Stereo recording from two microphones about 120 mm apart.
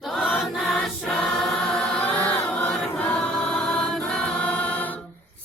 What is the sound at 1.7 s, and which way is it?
Chant, 10° left (ahead or behind).